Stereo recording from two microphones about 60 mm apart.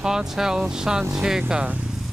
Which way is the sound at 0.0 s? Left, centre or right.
Centre.